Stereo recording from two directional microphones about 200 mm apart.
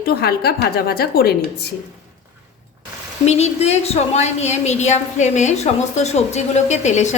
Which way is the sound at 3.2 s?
30° left (ahead or behind).